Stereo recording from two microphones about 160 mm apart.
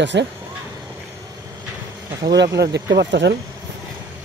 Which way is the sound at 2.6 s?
90° right.